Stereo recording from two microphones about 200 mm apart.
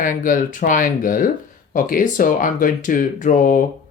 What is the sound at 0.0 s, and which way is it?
Speech, 40° left (ahead or behind).